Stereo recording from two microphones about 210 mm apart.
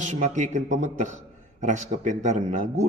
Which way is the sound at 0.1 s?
35° right (ahead or behind).